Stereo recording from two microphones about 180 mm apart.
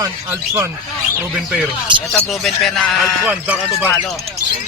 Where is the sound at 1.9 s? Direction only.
25° right (ahead or behind).